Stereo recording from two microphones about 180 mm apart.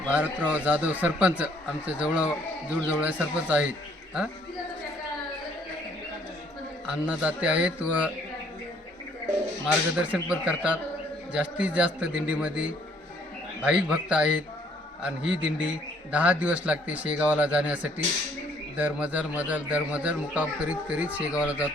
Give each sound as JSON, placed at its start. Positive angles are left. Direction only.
{"t": 0.1, "sound": "a man's voice", "side_deg": -10}
{"t": 6.8, "sound": "a man's voice", "side_deg": -5}
{"t": 9.9, "sound": "a man's voice", "side_deg": -5}